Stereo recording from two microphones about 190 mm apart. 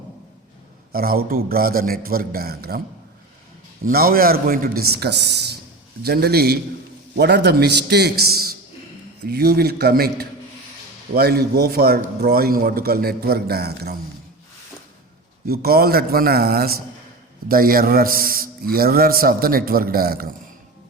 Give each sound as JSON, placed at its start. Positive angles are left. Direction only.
{"t": 0.9, "sound": "a man's voice", "side_deg": -50}
{"t": 3.8, "sound": "a man's voice", "side_deg": -50}
{"t": 15.4, "sound": "a man's voice", "side_deg": -55}